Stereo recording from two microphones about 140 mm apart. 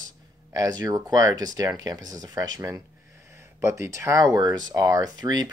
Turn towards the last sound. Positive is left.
turn(degrees=-30)  # may be behind; listen again after turning